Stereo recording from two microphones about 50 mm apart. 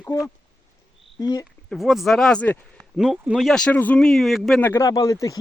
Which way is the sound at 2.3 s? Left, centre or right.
Left.